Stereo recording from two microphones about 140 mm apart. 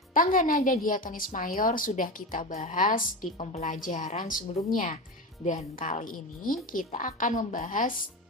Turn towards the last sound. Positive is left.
turn(degrees=65)  # may be behind; listen again after turning